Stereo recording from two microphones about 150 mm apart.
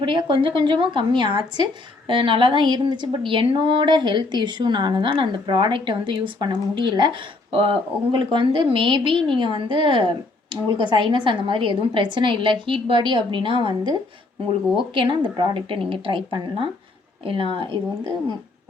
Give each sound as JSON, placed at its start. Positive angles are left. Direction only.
{"t": 0.0, "sound": "a woman's voice", "side_deg": -35}